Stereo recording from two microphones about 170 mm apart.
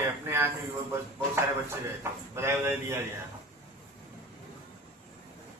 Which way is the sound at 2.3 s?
15° right (ahead or behind).